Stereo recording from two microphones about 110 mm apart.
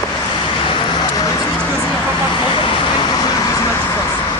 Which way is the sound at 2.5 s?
45° left (ahead or behind).